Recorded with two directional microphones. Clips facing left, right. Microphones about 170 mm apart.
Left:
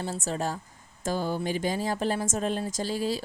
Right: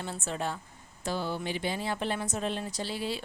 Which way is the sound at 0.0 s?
40° left (ahead or behind).